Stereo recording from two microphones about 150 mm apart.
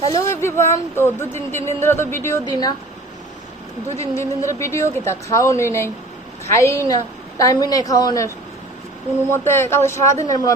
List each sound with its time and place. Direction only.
0.1 s a woman's voice: 20° left (ahead or behind)
3.9 s a woman's voice: 20° left (ahead or behind)
9.3 s speech: 15° left (ahead or behind)